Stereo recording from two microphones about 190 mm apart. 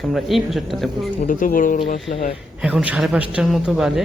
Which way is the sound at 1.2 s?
45° left (ahead or behind).